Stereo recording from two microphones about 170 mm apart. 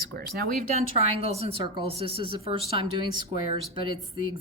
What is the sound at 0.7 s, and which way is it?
A woman's voice, 40° right (ahead or behind).